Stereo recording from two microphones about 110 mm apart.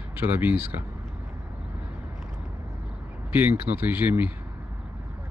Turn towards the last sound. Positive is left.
turn(degrees=-15)  # may be behind; listen again after turning